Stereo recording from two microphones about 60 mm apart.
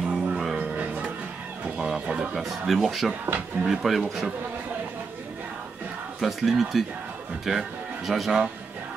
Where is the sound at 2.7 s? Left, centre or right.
Centre.